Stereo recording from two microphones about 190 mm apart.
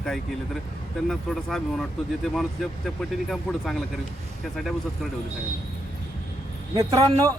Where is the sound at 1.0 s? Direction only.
Centre (ahead or behind).